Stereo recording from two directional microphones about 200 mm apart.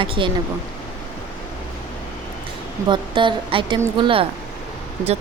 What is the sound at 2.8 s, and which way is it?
Speech, 25° right (ahead or behind).